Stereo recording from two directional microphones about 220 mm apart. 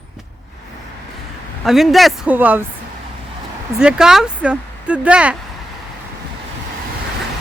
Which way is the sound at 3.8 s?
5° right (ahead or behind).